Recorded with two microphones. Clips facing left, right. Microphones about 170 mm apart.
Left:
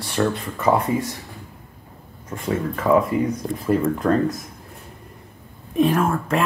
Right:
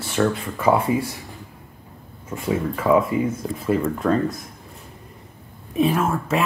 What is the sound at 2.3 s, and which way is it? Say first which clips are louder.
Speech: right 1 dB; 5° right (ahead or behind).